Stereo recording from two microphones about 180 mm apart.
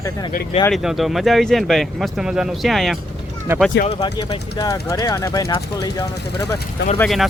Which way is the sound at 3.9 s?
30° left (ahead or behind).